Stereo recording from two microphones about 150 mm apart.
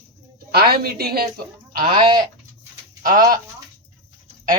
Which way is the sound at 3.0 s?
65° right (ahead or behind).